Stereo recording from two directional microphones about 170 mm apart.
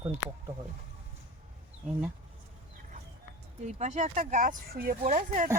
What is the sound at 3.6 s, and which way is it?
Speech, 40° right (ahead or behind).